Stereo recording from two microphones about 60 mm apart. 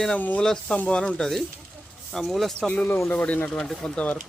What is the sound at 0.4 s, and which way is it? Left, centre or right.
Speech, centre.